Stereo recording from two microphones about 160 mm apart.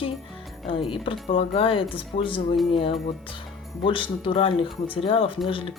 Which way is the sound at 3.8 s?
30° left (ahead or behind).